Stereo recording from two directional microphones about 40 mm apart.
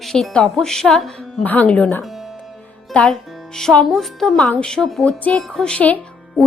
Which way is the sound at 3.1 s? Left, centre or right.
Centre.